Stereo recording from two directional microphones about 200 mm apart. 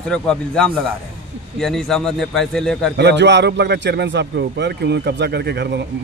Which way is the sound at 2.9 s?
60° right (ahead or behind).